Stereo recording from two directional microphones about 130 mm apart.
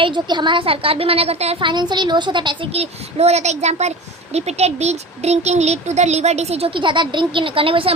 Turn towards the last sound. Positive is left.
turn(degrees=-45)  # may be behind; listen again after turning